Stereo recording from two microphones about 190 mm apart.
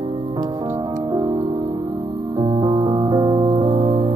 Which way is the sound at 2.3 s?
20° right (ahead or behind).